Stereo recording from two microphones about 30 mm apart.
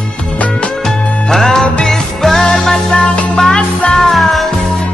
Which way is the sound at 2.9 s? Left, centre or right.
Left.